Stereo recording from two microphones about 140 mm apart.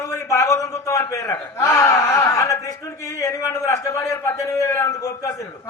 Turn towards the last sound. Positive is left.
turn(degrees=20)  # may be behind; listen again after turning